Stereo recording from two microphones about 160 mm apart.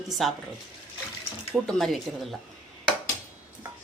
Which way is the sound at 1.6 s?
Centre (ahead or behind).